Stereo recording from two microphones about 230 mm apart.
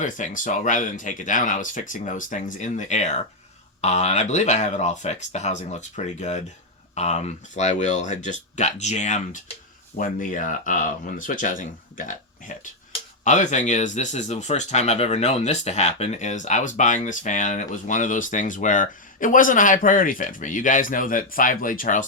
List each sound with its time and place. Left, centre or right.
0.0 s speech: left